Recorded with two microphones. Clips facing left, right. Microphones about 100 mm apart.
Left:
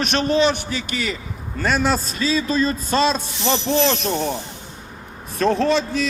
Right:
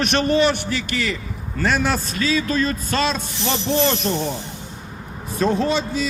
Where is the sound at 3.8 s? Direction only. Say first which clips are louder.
Even; centre (ahead or behind).